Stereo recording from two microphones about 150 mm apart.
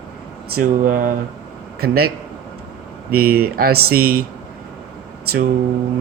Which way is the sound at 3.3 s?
90° right.